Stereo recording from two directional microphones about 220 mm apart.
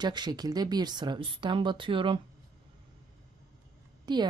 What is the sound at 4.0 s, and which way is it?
Speech, 20° right (ahead or behind).